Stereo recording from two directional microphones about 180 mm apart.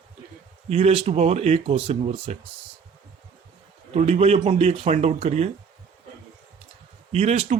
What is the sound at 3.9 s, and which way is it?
Speech, 35° right (ahead or behind).